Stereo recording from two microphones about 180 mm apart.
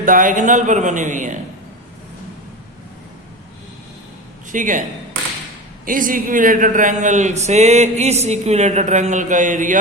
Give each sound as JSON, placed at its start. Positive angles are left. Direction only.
{"t": 0.0, "sound": "a man's voice", "side_deg": -50}
{"t": 4.5, "sound": "a man's voice", "side_deg": -45}
{"t": 5.8, "sound": "a man's voice", "side_deg": -50}